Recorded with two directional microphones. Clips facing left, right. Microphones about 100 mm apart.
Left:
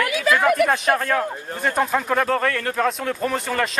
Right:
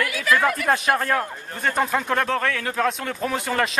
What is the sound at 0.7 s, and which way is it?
A man's voice, 5° right (ahead or behind).